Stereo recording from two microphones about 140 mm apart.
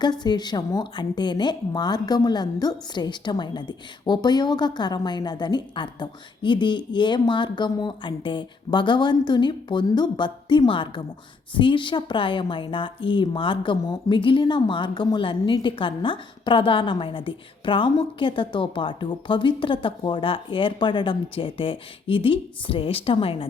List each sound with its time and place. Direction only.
0.0 s a woman's voice: 30° left (ahead or behind)